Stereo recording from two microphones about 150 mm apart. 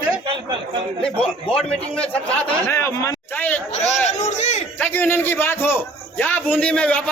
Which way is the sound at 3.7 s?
50° left (ahead or behind).